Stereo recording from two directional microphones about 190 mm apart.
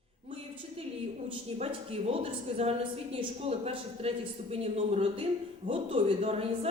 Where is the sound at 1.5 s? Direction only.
30° right (ahead or behind).